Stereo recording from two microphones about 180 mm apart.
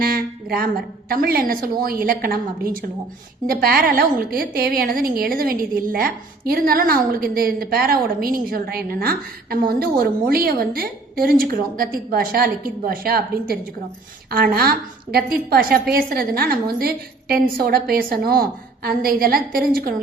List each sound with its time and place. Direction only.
0.0 s a woman's voice: 55° right (ahead or behind)